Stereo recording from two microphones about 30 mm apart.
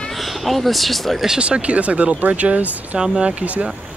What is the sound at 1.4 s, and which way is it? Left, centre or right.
Speech, right.